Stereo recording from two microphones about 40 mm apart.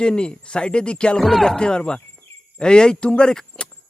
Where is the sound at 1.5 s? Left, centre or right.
Left.